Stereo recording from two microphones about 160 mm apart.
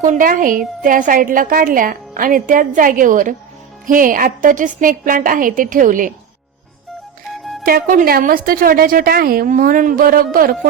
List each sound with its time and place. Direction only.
0.0 s a woman's voice: 55° right (ahead or behind)
7.6 s a woman's voice: 60° right (ahead or behind)